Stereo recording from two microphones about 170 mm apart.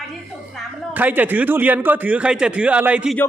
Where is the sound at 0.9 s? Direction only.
10° right (ahead or behind).